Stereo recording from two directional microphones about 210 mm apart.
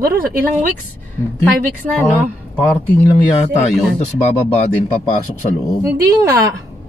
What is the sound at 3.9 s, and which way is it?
Speech, 35° left (ahead or behind).